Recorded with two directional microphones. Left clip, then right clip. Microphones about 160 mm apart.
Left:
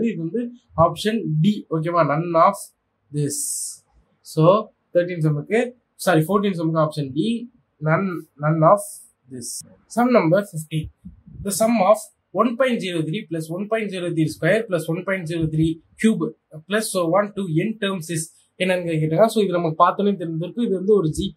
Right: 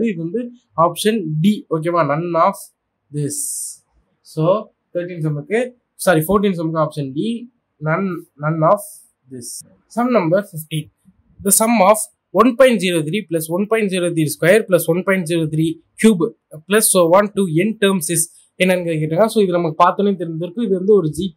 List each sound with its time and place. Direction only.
0.0 s speech: 35° right (ahead or behind)
4.3 s speech: 5° right (ahead or behind)
5.3 s speech: 25° right (ahead or behind)
11.4 s speech: 50° right (ahead or behind)
18.6 s speech: 40° right (ahead or behind)